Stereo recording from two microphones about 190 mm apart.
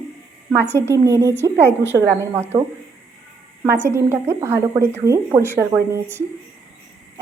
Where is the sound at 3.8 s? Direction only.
15° right (ahead or behind).